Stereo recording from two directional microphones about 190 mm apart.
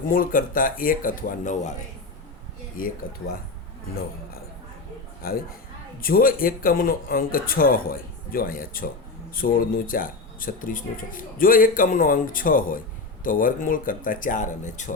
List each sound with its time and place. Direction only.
0.1 s speech: 50° left (ahead or behind)
5.2 s speech: 50° left (ahead or behind)